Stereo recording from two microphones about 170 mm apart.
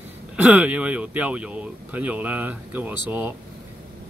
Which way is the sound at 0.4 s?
10° right (ahead or behind).